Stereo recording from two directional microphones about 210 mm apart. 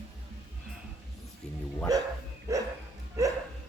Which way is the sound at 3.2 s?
15° right (ahead or behind).